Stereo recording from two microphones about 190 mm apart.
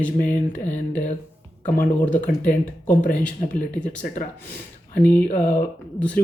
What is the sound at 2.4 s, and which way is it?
Speech, 10° left (ahead or behind).